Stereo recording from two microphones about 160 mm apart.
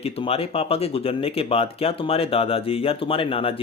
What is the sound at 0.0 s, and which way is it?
Speech, 40° left (ahead or behind).